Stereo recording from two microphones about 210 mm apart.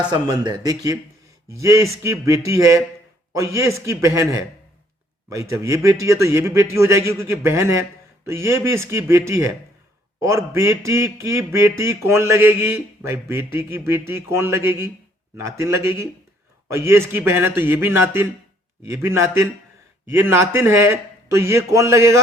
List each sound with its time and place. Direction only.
0.0 s a man's voice: 20° right (ahead or behind)